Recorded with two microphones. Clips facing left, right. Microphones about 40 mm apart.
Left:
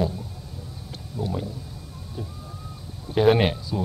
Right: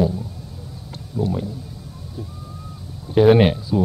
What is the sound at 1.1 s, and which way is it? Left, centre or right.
Speech, centre.